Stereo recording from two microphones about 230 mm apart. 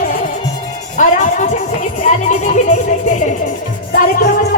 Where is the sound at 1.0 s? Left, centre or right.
Left.